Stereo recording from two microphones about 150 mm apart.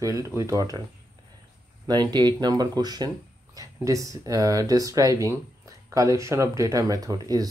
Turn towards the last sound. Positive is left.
turn(degrees=-25)  # may be behind; listen again after turning